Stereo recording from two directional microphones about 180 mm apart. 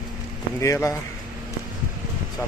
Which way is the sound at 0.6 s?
15° left (ahead or behind).